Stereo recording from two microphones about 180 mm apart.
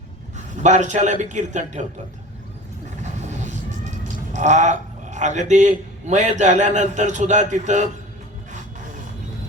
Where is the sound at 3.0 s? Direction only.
40° right (ahead or behind).